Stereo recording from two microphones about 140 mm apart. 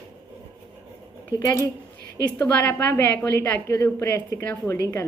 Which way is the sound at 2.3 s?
15° left (ahead or behind).